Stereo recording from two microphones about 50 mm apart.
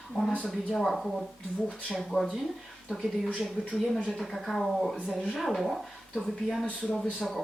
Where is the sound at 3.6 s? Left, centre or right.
Left.